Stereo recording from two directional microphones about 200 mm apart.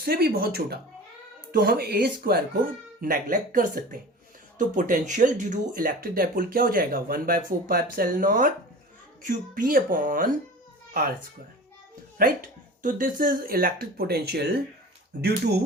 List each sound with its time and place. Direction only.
0.0 s speech: 50° right (ahead or behind)
12.1 s speech: 45° right (ahead or behind)